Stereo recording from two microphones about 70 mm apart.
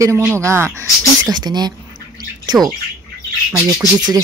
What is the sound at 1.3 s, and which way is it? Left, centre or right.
Speech, right.